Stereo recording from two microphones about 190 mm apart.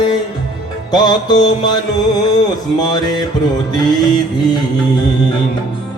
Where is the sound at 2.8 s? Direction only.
20° left (ahead or behind).